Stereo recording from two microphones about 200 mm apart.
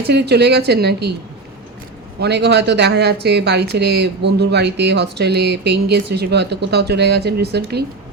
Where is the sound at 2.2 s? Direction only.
55° right (ahead or behind).